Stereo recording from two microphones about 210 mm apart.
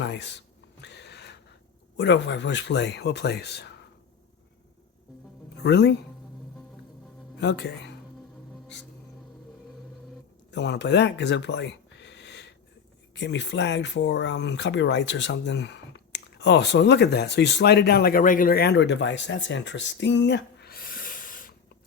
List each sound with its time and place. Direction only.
0.0 s a sound: 55° left (ahead or behind)
2.0 s speech: 55° left (ahead or behind)
5.5 s speech: 55° left (ahead or behind)
7.3 s speech: 55° left (ahead or behind)
10.5 s speech: 55° left (ahead or behind); by 21.5 s 40° left (ahead or behind)